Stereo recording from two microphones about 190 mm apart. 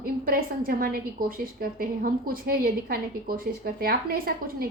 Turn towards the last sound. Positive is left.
turn(degrees=-50)  # may be behind; listen again after turning